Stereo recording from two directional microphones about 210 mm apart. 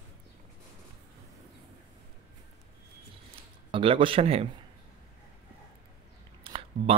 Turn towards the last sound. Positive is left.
turn(degrees=-25)  # may be behind; listen again after turning